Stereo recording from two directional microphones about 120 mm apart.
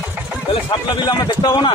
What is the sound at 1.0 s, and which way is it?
Speech, 35° left (ahead or behind).